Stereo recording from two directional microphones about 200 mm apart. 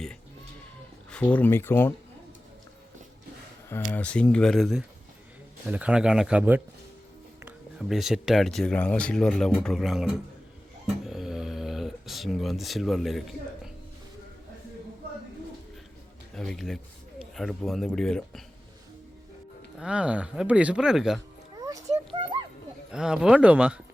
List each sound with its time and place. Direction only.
1.1 s speech: 5° left (ahead or behind)
3.9 s speech: 5° left (ahead or behind)
11.0 s a sound: centre (ahead or behind)
16.3 s speech: centre (ahead or behind)
19.8 s speech: 5° right (ahead or behind)
21.6 s a sound: 15° right (ahead or behind)
22.9 s speech: 5° right (ahead or behind)